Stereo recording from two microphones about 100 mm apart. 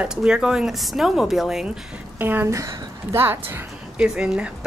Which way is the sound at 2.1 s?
20° right (ahead or behind).